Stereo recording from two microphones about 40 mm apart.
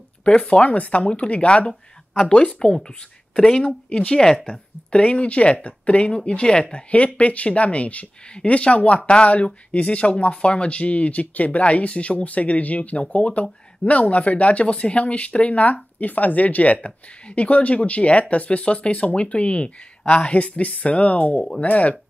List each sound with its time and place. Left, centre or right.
0.3 s speech: left
0.7 s speech: left
1.7 s speech: centre
3.9 s speech: left